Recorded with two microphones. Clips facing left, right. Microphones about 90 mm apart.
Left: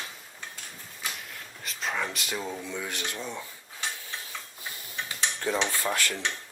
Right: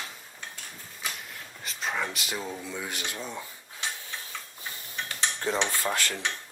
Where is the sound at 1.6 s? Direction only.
Centre (ahead or behind).